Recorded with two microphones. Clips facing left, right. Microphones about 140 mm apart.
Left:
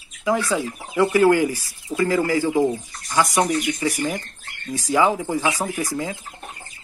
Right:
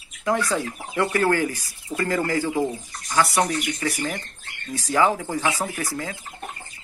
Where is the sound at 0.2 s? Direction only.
5° left (ahead or behind).